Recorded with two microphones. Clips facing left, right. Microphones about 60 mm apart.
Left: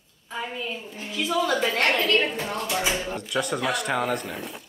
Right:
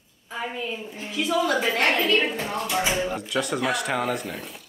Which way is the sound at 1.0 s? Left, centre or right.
Right.